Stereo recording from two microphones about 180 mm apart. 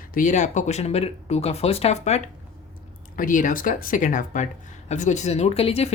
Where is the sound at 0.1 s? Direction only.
45° left (ahead or behind).